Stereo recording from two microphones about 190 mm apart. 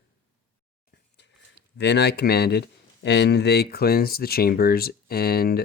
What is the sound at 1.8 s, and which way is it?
Speech, 60° left (ahead or behind).